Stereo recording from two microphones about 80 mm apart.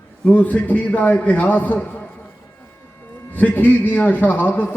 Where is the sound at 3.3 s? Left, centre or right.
Left.